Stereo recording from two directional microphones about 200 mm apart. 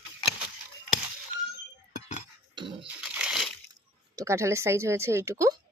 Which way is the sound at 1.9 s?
35° left (ahead or behind).